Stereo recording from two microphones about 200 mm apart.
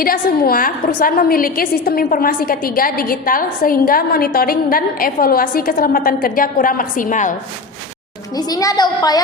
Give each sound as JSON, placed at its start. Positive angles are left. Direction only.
{"t": 0.0, "sound": "a woman's voice", "side_deg": 45}
{"t": 8.4, "sound": "a woman's voice", "side_deg": 20}